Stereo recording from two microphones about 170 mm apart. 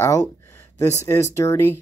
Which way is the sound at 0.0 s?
15° left (ahead or behind).